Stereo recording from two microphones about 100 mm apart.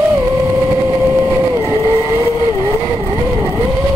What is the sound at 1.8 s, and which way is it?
Vehicle, 75° right (ahead or behind).